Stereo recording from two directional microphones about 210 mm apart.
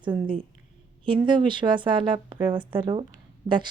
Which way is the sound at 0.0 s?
20° right (ahead or behind).